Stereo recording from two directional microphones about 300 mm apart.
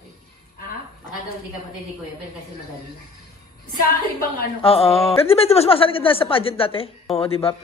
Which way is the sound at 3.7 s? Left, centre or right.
Left.